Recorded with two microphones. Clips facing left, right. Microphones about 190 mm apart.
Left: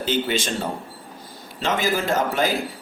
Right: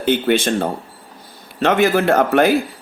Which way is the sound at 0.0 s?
60° right (ahead or behind).